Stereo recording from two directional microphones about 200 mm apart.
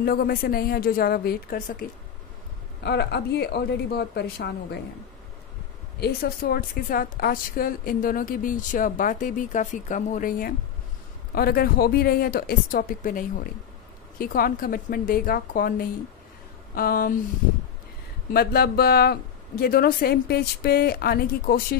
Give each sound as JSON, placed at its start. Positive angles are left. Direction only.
{"t": 0.0, "sound": "a woman's voice", "side_deg": 50}
{"t": 5.9, "sound": "a woman's voice", "side_deg": 50}
{"t": 18.3, "sound": "a woman's voice", "side_deg": 50}